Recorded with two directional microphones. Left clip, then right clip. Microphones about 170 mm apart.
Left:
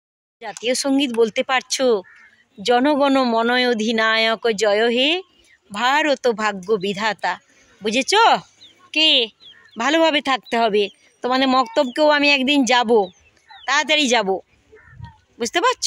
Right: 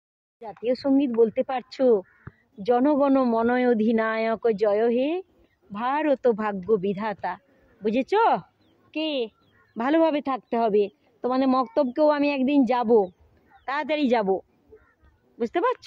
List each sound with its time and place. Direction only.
0.7 s a woman's voice: 15° left (ahead or behind)
2.6 s a woman's voice: 15° left (ahead or behind)
3.4 s a woman's voice: 5° right (ahead or behind)
9.8 s speech: centre (ahead or behind)
10.0 s a woman's voice: 15° left (ahead or behind)
15.3 s speech: 5° left (ahead or behind)